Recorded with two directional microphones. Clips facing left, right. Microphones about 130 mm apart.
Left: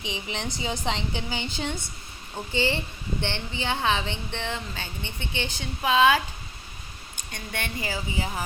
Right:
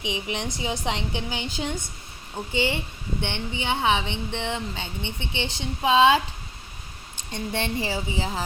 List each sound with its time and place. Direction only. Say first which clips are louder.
0.0 s a woman's voice: right 3 dB; 15° right (ahead or behind)